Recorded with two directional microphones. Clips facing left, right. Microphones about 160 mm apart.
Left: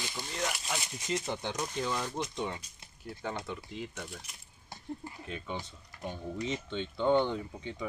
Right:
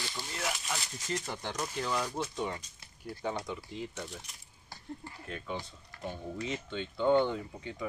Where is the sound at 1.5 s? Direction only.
Centre (ahead or behind).